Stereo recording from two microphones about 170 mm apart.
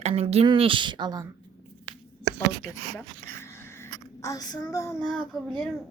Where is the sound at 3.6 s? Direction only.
15° left (ahead or behind).